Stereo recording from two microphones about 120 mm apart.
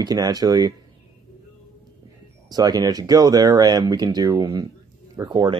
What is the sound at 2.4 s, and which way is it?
Speech, 35° right (ahead or behind).